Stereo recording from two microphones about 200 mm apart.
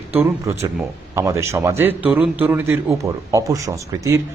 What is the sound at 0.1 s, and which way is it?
A man's voice, 10° right (ahead or behind).